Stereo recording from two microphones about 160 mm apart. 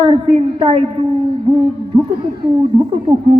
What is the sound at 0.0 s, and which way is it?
Speech, 35° right (ahead or behind).